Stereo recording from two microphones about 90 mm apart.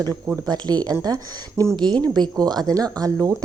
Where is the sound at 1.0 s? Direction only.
40° right (ahead or behind).